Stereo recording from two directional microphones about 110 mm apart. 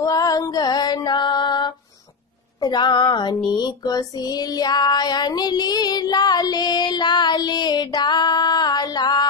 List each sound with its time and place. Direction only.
0.0 s female singing: 35° left (ahead or behind)